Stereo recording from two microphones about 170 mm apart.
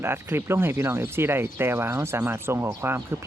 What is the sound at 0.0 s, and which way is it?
Speech, 15° right (ahead or behind).